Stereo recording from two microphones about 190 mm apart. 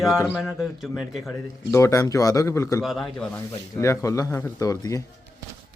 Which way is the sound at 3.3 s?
15° left (ahead or behind).